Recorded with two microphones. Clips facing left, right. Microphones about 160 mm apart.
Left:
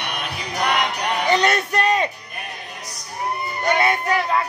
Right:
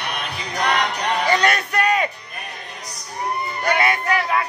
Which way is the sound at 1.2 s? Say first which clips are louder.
Left 2 dB; 20° left (ahead or behind).